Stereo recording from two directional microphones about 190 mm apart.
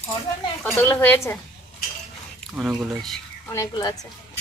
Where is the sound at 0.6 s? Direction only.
10° left (ahead or behind).